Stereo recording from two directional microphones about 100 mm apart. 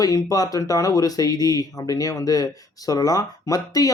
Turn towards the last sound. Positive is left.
turn(degrees=40)  # may be behind; listen again after turning